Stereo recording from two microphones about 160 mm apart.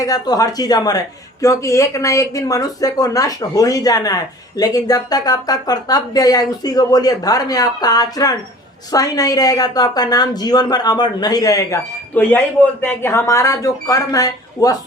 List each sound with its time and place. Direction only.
0.0 s speech: 25° left (ahead or behind)
12.1 s speech: 10° left (ahead or behind)